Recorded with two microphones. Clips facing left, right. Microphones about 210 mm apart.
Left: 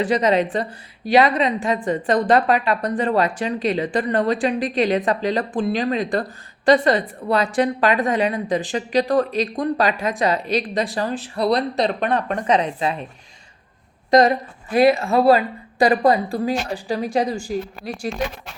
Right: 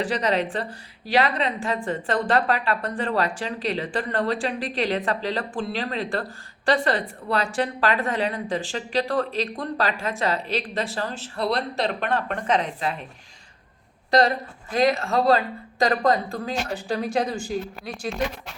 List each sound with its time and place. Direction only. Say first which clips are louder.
0.0 s a woman's voice: left 6 dB; 20° left (ahead or behind)
14.1 s a woman's voice: left 5 dB; 20° left (ahead or behind)